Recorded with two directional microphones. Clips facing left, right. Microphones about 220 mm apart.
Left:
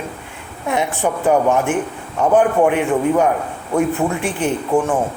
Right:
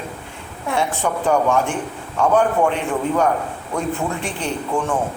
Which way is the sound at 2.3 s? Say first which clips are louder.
Left 5 dB; 15° left (ahead or behind).